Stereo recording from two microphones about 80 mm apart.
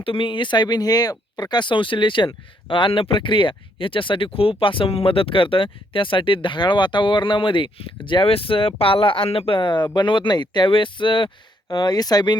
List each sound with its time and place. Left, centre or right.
0.1 s speech: left
1.4 s speech: left
11.7 s speech: left